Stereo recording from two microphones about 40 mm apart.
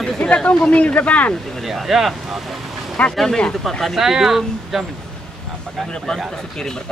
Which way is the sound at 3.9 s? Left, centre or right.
Centre.